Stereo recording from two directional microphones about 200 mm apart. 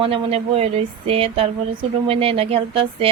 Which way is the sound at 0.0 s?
30° right (ahead or behind).